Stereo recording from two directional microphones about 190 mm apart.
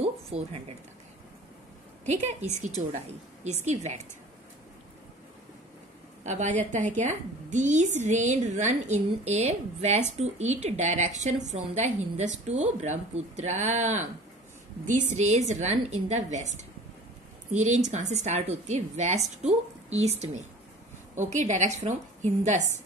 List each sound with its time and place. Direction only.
0.0 s a sound: 30° right (ahead or behind)
2.0 s a woman's voice: 35° right (ahead or behind)
3.6 s a woman's voice: 35° right (ahead or behind)
6.2 s a woman's voice: 40° right (ahead or behind)
15.0 s a woman's voice: 35° right (ahead or behind)